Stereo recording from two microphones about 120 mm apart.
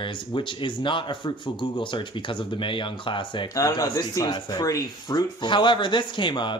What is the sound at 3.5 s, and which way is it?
Speech, 30° left (ahead or behind).